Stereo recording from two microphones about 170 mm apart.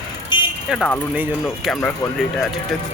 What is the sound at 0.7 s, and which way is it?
Speech, 5° left (ahead or behind).